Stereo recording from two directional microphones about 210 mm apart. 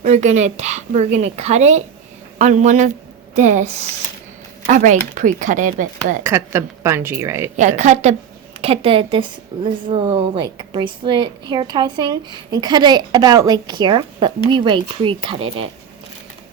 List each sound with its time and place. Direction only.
0.0 s a woman's voice: 35° right (ahead or behind)
6.2 s a woman's voice: 10° right (ahead or behind)
7.5 s a woman's voice: 35° right (ahead or behind)